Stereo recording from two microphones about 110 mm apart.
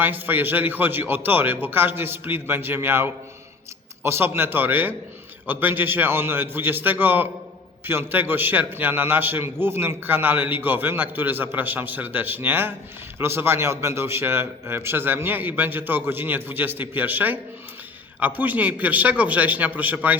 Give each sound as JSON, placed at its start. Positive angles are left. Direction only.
{"t": 0.0, "sound": "a man's voice", "side_deg": -15}